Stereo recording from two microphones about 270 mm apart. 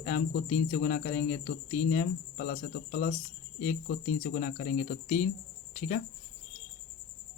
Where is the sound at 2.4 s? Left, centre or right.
Left.